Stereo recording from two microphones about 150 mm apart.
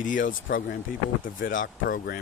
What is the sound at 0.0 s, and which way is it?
Speech, 65° left (ahead or behind).